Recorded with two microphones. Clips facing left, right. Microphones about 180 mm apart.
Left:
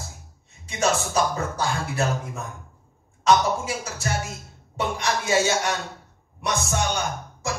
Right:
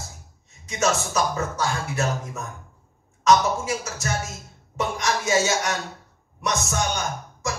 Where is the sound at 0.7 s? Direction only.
35° left (ahead or behind).